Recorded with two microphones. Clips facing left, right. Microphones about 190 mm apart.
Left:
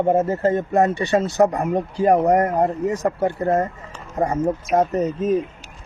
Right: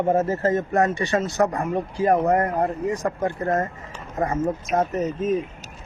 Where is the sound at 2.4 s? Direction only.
40° left (ahead or behind).